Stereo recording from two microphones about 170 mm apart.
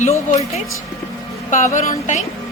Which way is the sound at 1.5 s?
45° left (ahead or behind).